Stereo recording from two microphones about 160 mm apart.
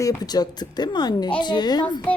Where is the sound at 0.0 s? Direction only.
20° left (ahead or behind).